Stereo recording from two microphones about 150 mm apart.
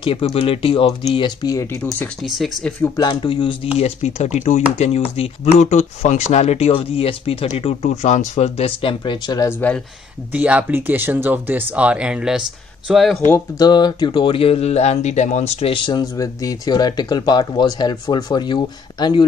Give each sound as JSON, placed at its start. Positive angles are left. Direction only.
{"t": 0.0, "sound": "speech", "side_deg": 40}
{"t": 2.2, "sound": "speech", "side_deg": 0}
{"t": 3.0, "sound": "speech", "side_deg": 35}
{"t": 3.7, "sound": "speech", "side_deg": 45}
{"t": 9.5, "sound": "speech", "side_deg": 10}
{"t": 10.3, "sound": "speech", "side_deg": -10}
{"t": 13.6, "sound": "speech", "side_deg": 25}